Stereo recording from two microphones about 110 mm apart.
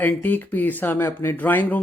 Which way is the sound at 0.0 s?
15° left (ahead or behind).